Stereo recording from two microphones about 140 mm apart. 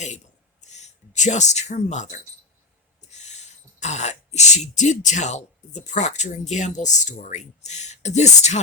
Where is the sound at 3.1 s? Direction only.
55° left (ahead or behind).